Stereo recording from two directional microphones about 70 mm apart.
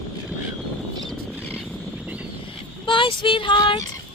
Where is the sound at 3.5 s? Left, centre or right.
Left.